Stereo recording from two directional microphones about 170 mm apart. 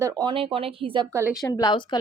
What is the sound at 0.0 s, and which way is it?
Speech, 25° right (ahead or behind).